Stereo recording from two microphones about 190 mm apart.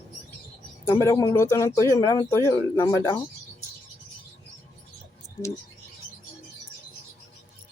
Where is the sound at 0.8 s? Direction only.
15° left (ahead or behind).